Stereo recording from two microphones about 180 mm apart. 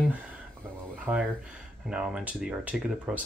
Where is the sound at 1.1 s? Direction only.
10° right (ahead or behind).